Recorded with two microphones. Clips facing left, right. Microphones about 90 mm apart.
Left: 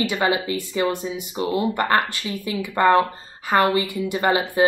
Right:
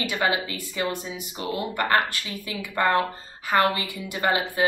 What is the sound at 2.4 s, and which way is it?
A woman's voice, 35° left (ahead or behind).